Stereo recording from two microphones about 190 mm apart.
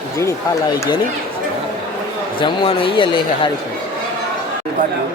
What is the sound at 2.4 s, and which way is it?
A man's voice, 25° left (ahead or behind).